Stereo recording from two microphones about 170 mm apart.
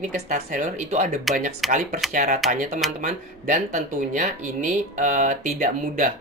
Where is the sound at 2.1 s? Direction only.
50° right (ahead or behind).